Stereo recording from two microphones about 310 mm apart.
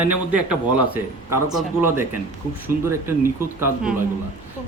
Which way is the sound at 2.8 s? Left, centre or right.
Centre.